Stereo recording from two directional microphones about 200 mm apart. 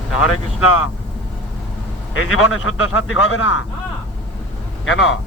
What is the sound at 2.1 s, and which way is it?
Speech, 90° left.